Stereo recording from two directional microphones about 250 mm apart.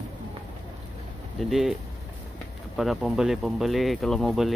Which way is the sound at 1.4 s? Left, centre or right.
Centre.